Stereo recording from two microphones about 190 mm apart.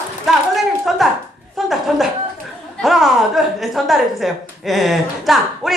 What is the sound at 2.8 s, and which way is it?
A woman's voice, centre (ahead or behind).